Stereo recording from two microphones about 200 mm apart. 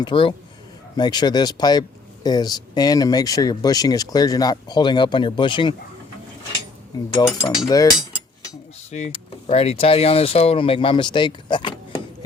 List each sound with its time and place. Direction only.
0.0 s speech: 25° left (ahead or behind)
6.9 s speech: 20° left (ahead or behind)
8.9 s speech: 35° left (ahead or behind)